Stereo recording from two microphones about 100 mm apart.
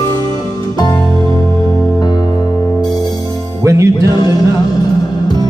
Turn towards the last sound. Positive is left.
turn(degrees=-30)  # may be behind; listen again after turning